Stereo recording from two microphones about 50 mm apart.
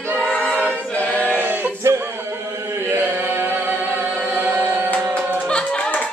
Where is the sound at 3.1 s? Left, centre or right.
Right.